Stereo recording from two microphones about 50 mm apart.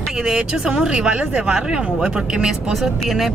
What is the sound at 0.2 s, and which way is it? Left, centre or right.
Speech, centre.